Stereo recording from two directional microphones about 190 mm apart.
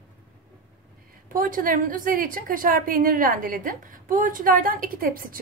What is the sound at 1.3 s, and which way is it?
A woman's voice, 45° right (ahead or behind).